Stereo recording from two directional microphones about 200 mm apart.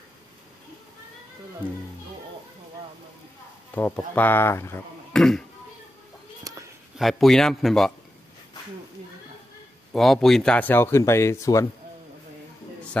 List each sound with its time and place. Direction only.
3.7 s speech: 10° left (ahead or behind)
6.4 s a sound: 15° right (ahead or behind)
7.0 s speech: centre (ahead or behind)
9.9 s speech: centre (ahead or behind)